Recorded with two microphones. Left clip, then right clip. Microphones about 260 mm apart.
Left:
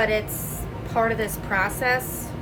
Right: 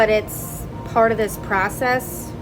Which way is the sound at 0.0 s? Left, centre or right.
Right.